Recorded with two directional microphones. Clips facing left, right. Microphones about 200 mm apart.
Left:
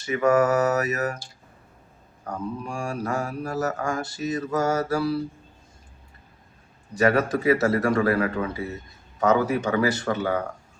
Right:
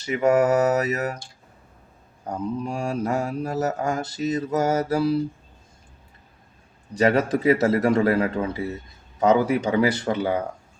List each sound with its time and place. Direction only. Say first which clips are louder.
0.0 s speech: right 1 dB; 20° right (ahead or behind)
2.2 s speech: right 4 dB; 20° right (ahead or behind)
7.0 s speech: right 1 dB; 25° right (ahead or behind)